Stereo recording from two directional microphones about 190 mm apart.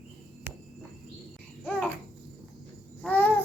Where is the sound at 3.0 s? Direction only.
10° left (ahead or behind).